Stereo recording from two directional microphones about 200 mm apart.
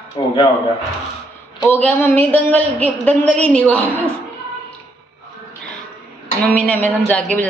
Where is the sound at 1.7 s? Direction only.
10° left (ahead or behind).